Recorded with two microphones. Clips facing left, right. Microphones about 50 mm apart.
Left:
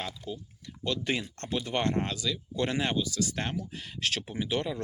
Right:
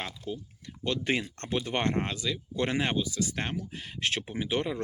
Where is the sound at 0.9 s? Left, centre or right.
Right.